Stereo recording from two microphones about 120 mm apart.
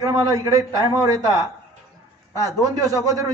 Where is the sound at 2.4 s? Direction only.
30° right (ahead or behind).